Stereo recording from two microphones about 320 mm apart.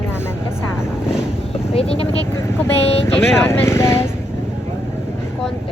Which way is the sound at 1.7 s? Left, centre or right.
Centre.